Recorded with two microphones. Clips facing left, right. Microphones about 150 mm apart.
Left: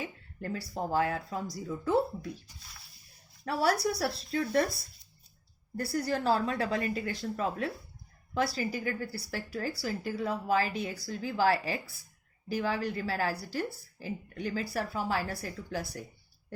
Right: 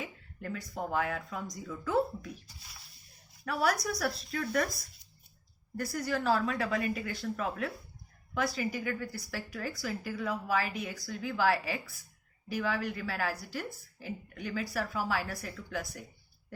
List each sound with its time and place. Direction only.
0.0 s speech: 30° left (ahead or behind)
3.4 s speech: 30° left (ahead or behind)